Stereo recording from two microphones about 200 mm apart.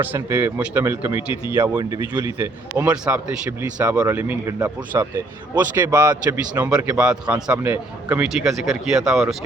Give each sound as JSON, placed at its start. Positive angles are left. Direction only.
{"t": 0.0, "sound": "speech", "side_deg": -10}
{"t": 1.7, "sound": "a man's voice", "side_deg": -20}